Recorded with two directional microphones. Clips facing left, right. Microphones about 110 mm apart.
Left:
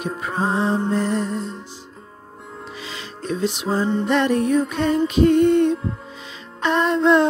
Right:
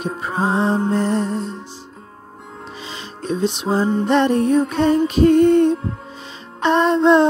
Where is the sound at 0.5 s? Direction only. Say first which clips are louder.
Right 3 dB; 25° right (ahead or behind).